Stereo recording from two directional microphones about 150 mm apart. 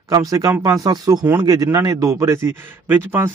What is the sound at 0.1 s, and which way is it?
A man's voice, 25° right (ahead or behind).